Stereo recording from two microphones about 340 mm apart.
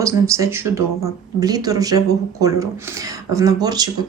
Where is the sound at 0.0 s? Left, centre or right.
Centre.